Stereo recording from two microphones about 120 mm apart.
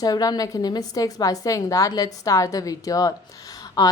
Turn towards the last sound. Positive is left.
turn(degrees=35)  # may be behind; listen again after turning